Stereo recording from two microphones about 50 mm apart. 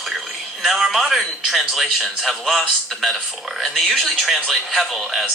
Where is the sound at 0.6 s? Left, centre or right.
Centre.